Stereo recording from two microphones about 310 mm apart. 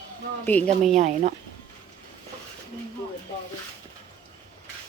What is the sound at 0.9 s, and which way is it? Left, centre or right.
Speech, right.